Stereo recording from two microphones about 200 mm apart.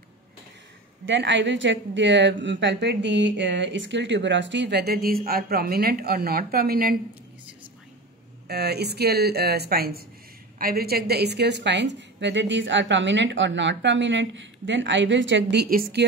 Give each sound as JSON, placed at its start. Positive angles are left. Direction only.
{"t": 1.0, "sound": "speech", "side_deg": -65}
{"t": 8.5, "sound": "speech", "side_deg": -55}